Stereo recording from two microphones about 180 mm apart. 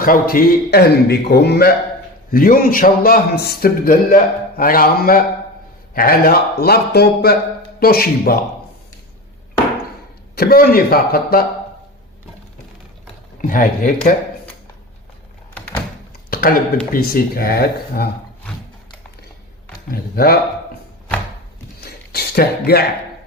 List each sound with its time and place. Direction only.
0.0 s a man's voice: 50° left (ahead or behind)
2.3 s a man's voice: 50° left (ahead or behind)
10.3 s a man's voice: 55° left (ahead or behind)
13.4 s a man's voice: 50° left (ahead or behind)
15.5 s door: 10° left (ahead or behind)
16.3 s a sound: 55° left (ahead or behind)
16.9 s a man's voice: 55° left (ahead or behind)
19.9 s a man's voice: 55° left (ahead or behind)
21.8 s a sound: 60° left (ahead or behind)